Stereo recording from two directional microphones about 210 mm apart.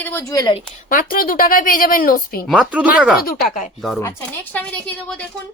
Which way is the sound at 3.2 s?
45° left (ahead or behind).